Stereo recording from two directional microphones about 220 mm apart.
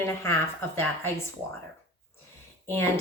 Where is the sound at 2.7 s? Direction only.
10° left (ahead or behind).